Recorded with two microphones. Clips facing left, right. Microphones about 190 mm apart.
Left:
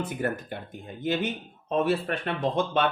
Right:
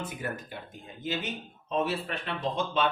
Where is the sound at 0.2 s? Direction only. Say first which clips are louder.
Left 6 dB; 60° left (ahead or behind).